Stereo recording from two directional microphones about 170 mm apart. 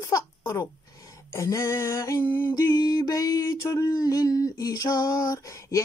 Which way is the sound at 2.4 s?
20° left (ahead or behind).